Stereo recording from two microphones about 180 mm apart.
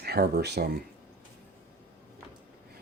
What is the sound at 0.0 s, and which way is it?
Speech, 60° right (ahead or behind).